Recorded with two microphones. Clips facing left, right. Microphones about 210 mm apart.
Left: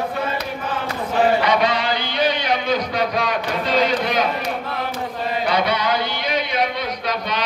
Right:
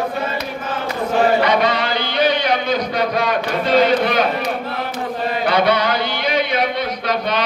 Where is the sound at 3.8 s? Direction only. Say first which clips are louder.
Right 4 dB; 60° right (ahead or behind).